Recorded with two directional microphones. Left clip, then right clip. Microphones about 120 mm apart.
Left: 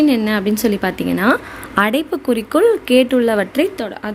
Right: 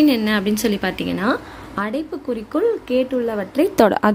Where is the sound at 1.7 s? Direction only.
30° left (ahead or behind).